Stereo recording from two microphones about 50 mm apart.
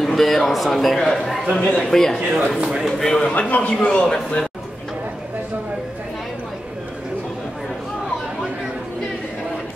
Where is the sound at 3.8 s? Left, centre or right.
Centre.